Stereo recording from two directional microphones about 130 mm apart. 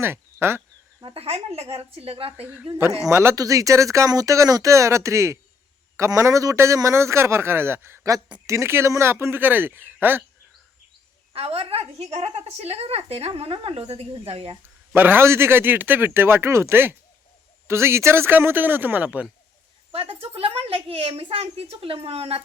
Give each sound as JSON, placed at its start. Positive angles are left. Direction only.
{"t": 0.0, "sound": "speech", "side_deg": -20}
{"t": 1.0, "sound": "a woman's voice", "side_deg": -50}
{"t": 3.1, "sound": "a man's voice", "side_deg": -20}
{"t": 11.3, "sound": "a woman's voice", "side_deg": -50}
{"t": 14.9, "sound": "speech", "side_deg": -15}
{"t": 19.9, "sound": "a woman's voice", "side_deg": -50}